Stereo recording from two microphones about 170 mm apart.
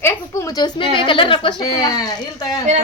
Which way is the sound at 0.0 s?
20° left (ahead or behind).